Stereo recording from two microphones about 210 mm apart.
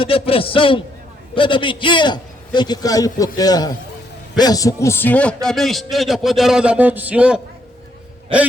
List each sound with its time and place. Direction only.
0.0 s a man's voice: 25° left (ahead or behind); by 7.4 s 5° right (ahead or behind)